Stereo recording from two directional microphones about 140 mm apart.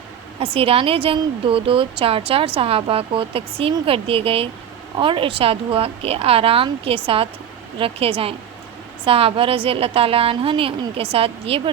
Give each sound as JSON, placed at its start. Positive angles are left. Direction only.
{"t": 0.3, "sound": "a woman's voice", "side_deg": -40}